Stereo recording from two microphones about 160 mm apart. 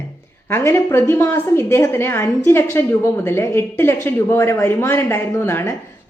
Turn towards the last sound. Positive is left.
turn(degrees=20)  # may be behind; listen again after turning